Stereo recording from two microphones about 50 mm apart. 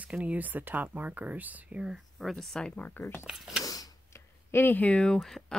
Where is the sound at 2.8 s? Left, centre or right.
Left.